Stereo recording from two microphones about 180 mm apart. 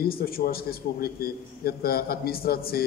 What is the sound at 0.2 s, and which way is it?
A man's voice, 55° left (ahead or behind).